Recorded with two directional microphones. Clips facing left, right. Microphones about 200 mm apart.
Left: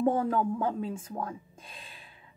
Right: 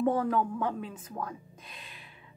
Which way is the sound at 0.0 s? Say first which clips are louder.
Left 1 dB; 25° left (ahead or behind).